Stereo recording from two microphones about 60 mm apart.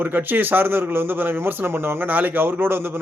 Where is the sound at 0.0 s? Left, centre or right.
Right.